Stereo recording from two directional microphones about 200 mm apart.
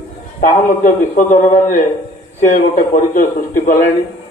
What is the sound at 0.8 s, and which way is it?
A man's voice, 35° left (ahead or behind).